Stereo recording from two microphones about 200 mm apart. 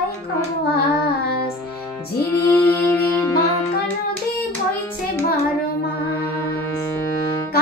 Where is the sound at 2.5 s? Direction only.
10° left (ahead or behind).